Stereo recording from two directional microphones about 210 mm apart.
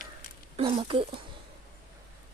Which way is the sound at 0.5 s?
30° right (ahead or behind).